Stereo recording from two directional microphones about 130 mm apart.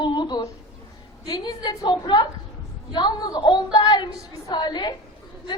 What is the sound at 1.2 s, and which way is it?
A woman's voice, 30° left (ahead or behind).